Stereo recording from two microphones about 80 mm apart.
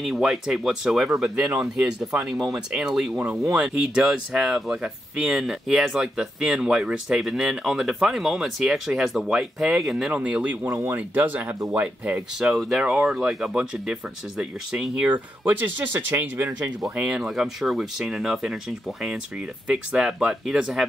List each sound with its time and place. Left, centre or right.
0.0 s speech: centre
10.1 s speech: centre
12.4 s speech: centre
15.0 s speech: right
16.9 s speech: centre
17.2 s speech: centre